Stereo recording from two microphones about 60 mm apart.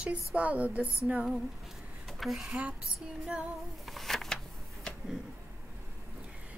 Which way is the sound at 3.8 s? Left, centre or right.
Centre.